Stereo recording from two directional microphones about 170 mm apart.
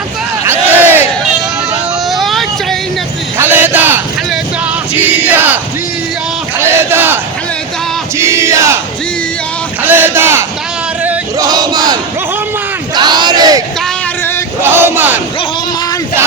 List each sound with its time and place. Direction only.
0.8 s battle cry: 10° right (ahead or behind)
2.1 s vehicle: centre (ahead or behind)
3.3 s crowd: 10° right (ahead or behind)
4.9 s battle cry: 10° right (ahead or behind)
6.7 s battle cry: 15° right (ahead or behind)
8.2 s battle cry: 15° right (ahead or behind)
9.8 s a sound: 10° right (ahead or behind)
13.0 s crowd: 25° right (ahead or behind)
14.6 s a sound: 15° right (ahead or behind)